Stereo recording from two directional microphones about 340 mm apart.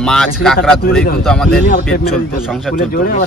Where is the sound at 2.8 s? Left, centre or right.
Left.